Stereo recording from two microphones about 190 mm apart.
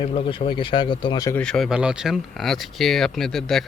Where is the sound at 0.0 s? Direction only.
30° left (ahead or behind).